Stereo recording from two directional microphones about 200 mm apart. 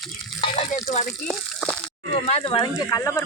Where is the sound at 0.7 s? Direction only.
35° left (ahead or behind).